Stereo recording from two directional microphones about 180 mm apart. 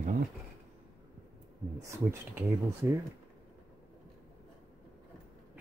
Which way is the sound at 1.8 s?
15° right (ahead or behind).